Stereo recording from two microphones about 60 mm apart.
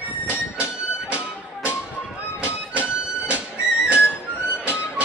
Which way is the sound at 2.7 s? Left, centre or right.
Right.